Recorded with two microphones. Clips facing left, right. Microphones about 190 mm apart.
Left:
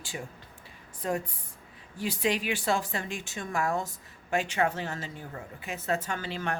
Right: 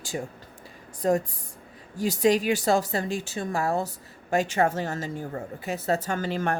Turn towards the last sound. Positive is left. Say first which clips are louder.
# right 6 dB
turn(degrees=-45)  # may be behind; listen again after turning